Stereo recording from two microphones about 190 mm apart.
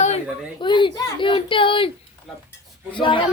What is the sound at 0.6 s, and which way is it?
Speech, 25° left (ahead or behind).